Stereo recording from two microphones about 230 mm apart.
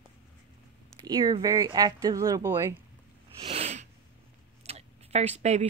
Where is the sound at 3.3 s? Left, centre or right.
Right.